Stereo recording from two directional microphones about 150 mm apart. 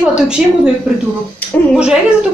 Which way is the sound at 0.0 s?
5° right (ahead or behind).